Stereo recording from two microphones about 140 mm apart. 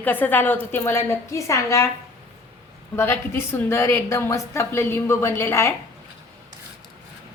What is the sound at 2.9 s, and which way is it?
A woman's voice, 15° left (ahead or behind).